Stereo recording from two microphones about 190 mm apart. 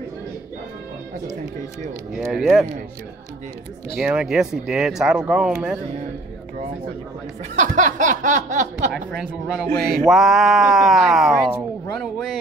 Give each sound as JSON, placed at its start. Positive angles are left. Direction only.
{"t": 2.1, "sound": "speech", "side_deg": 0}
{"t": 4.0, "sound": "speech", "side_deg": -5}
{"t": 7.5, "sound": "a sound", "side_deg": -40}
{"t": 9.3, "sound": "speech", "side_deg": 0}